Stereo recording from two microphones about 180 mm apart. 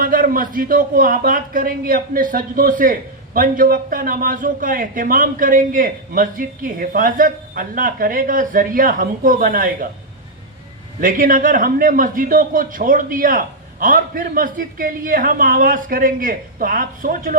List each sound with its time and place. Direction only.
0.0 s a man's voice: 50° right (ahead or behind)
11.0 s a man's voice: 50° right (ahead or behind)